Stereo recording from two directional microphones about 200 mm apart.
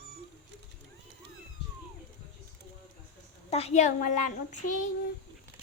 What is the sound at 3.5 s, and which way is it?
A child's voice, 30° left (ahead or behind).